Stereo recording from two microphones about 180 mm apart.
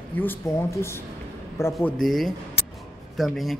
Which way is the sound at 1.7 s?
Centre (ahead or behind).